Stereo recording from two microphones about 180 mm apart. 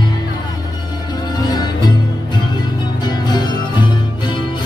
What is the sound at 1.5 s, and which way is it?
Music, 25° left (ahead or behind).